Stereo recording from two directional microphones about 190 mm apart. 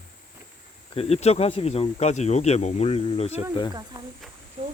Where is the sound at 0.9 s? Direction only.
30° left (ahead or behind).